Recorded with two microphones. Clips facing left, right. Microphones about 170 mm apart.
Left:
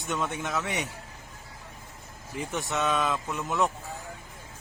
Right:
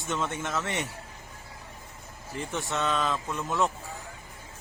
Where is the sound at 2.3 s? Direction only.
Centre (ahead or behind).